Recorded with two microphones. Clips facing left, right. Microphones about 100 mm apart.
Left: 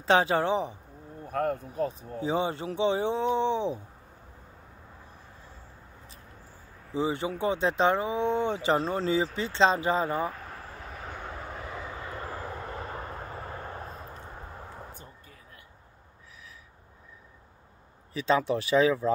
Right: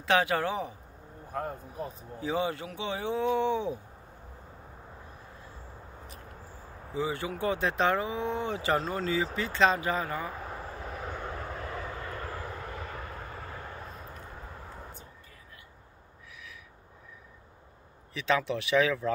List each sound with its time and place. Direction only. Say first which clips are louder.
0.0 s speech: left 3 dB; 30° left (ahead or behind)
1.3 s speech: left 7 dB; 65° left (ahead or behind)
2.1 s speech: left 1 dB; 25° left (ahead or behind)
6.9 s speech: left 3 dB; 25° left (ahead or behind)
10.3 s vehicle: right 3 dB; 15° right (ahead or behind); by 14.2 s 35° left (ahead or behind)
18.1 s speech: left 3 dB; 35° left (ahead or behind)